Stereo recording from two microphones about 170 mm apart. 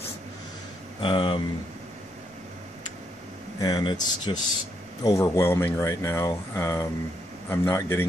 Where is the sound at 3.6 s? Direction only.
25° left (ahead or behind).